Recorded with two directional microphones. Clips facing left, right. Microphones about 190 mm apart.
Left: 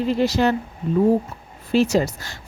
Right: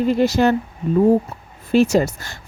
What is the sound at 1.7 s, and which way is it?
Speech, 50° right (ahead or behind).